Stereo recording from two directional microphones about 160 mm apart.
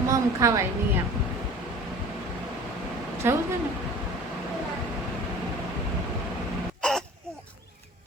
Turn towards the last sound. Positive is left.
turn(degrees=5)  # may be behind; listen again after turning